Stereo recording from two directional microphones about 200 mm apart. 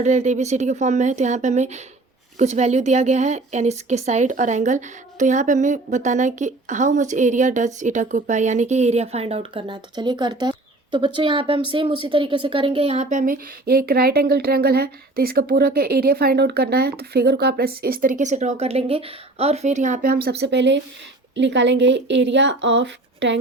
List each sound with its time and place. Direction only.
0.0 s a woman's voice: 35° right (ahead or behind); by 23.4 s 65° right (ahead or behind)